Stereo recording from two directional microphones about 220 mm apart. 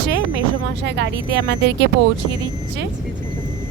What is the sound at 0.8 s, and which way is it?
A woman's voice, 50° right (ahead or behind).